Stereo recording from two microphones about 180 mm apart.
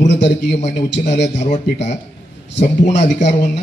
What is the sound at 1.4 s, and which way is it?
Speech, 40° left (ahead or behind).